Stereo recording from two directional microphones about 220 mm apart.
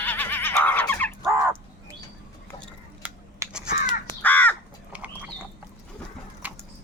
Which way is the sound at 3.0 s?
10° right (ahead or behind).